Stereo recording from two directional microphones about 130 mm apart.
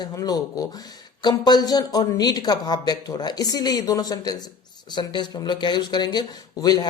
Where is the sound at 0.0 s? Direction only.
30° left (ahead or behind).